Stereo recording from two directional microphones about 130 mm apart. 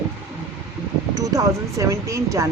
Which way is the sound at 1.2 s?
25° right (ahead or behind).